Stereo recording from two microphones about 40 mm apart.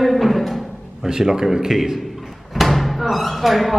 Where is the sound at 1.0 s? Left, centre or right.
Centre.